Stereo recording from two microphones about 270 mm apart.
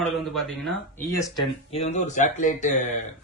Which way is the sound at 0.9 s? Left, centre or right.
Centre.